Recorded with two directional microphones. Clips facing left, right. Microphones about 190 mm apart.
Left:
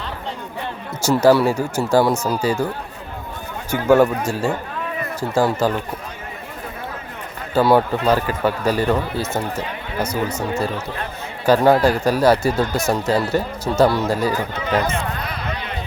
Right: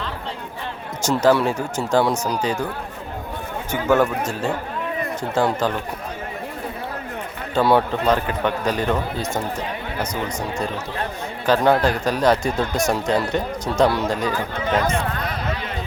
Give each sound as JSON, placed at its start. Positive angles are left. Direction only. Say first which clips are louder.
{"t": 1.0, "sound": "speech", "louder": "left 3 dB", "side_deg": 10}
{"t": 3.7, "sound": "speech", "louder": "left 4 dB", "side_deg": 10}
{"t": 7.5, "sound": "speech", "louder": "left 2 dB", "side_deg": 0}
{"t": 14.8, "sound": "a sound", "louder": "right 1 dB", "side_deg": -45}